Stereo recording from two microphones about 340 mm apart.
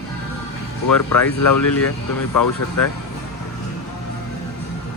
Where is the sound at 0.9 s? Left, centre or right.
Left.